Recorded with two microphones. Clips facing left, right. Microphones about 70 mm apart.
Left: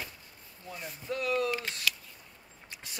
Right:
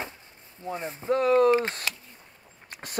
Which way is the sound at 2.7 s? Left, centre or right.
Right.